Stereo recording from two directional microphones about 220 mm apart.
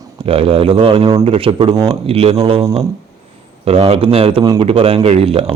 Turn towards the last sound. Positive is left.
turn(degrees=-25)  # may be behind; listen again after turning